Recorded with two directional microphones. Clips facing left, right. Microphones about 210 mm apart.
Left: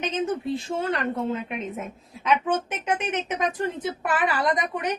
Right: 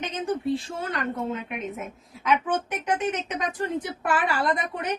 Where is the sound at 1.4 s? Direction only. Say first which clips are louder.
Left 1 dB; 30° left (ahead or behind).